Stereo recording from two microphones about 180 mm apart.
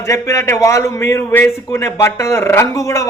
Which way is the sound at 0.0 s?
15° left (ahead or behind).